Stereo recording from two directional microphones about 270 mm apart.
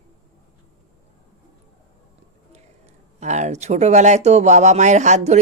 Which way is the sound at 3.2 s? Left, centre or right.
Right.